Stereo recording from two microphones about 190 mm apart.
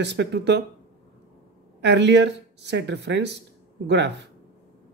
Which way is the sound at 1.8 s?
65° right (ahead or behind).